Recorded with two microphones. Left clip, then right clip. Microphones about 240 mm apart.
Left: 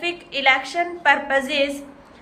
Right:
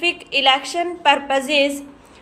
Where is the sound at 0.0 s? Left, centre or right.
Centre.